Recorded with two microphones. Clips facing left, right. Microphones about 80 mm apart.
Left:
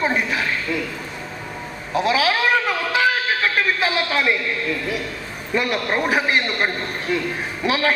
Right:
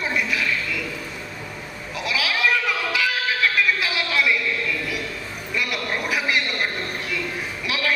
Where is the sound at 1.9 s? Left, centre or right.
Left.